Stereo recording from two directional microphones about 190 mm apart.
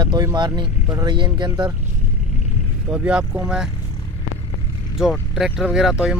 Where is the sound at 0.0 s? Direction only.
20° right (ahead or behind).